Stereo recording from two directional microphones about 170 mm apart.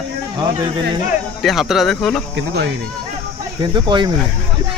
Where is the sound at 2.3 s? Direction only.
85° right.